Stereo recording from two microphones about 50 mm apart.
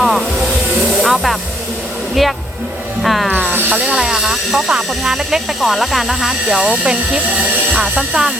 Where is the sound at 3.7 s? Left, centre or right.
Right.